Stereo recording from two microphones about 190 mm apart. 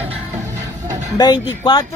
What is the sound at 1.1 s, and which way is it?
Speech, 20° left (ahead or behind).